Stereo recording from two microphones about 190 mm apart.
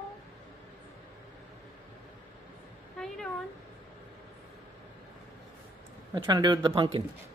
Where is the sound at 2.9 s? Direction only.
5° left (ahead or behind).